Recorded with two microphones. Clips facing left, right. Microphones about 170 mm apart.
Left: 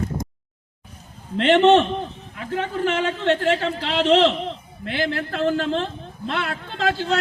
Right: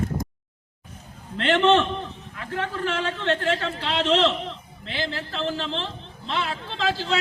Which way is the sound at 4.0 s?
35° left (ahead or behind).